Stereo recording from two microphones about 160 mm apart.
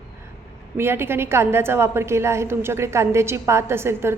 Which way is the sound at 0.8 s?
15° right (ahead or behind).